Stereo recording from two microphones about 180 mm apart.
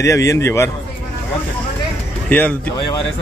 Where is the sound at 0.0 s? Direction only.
15° left (ahead or behind).